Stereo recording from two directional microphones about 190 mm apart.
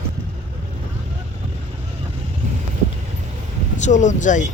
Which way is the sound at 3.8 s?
40° left (ahead or behind).